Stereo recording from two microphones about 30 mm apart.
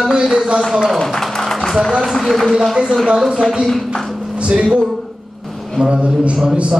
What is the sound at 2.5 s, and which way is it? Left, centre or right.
Speech, centre.